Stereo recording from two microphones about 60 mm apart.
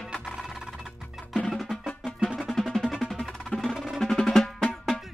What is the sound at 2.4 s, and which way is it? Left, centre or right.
Music, centre.